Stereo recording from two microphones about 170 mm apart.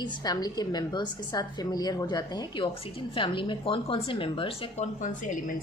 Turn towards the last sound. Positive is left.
turn(degrees=50)  # may be behind; listen again after turning